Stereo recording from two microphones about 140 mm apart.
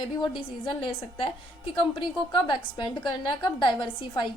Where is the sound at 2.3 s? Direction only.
30° left (ahead or behind).